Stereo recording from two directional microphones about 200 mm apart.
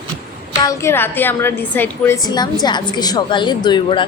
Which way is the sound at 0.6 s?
15° left (ahead or behind).